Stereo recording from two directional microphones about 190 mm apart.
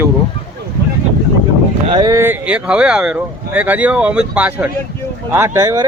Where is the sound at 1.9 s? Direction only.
20° right (ahead or behind).